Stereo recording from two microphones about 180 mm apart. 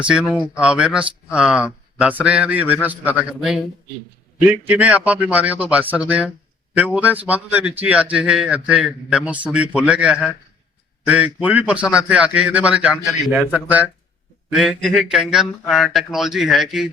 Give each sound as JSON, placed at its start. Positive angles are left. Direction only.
{"t": 0.0, "sound": "a man's voice", "side_deg": -5}